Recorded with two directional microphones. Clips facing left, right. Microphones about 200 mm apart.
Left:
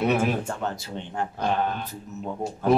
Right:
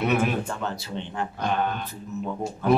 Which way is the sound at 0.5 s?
45° left (ahead or behind).